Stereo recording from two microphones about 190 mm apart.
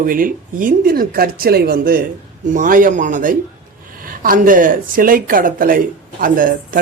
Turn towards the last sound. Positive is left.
turn(degrees=-45)  # may be behind; listen again after turning